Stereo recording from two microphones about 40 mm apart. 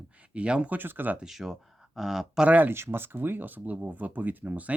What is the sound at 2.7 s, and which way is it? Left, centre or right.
Speech, right.